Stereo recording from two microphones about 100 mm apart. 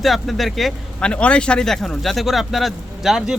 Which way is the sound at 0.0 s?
Centre (ahead or behind).